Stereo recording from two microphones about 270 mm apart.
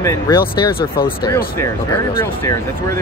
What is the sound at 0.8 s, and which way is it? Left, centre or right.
Speech, left.